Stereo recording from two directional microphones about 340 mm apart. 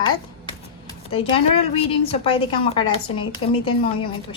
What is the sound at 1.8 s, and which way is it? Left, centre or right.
A woman's voice, centre.